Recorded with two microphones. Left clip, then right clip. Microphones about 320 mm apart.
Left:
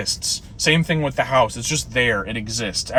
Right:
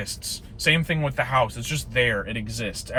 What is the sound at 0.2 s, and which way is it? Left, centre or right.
Speech, centre.